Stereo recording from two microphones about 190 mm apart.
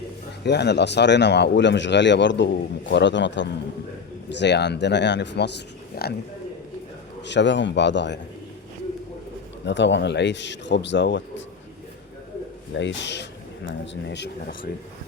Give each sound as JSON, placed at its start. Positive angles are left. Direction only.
{"t": 0.4, "sound": "speech", "side_deg": 65}
{"t": 7.3, "sound": "speech", "side_deg": 70}
{"t": 9.6, "sound": "speech", "side_deg": 70}
{"t": 12.7, "sound": "speech", "side_deg": 70}